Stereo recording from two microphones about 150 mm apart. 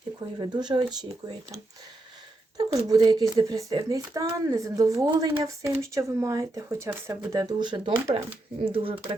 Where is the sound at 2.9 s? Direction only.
25° right (ahead or behind).